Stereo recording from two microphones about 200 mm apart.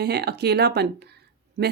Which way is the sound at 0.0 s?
60° right (ahead or behind).